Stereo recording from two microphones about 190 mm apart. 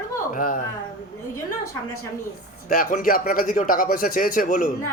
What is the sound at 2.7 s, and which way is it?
Speech, 45° left (ahead or behind).